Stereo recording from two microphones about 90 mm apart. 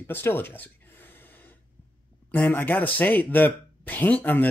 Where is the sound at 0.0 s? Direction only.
25° left (ahead or behind).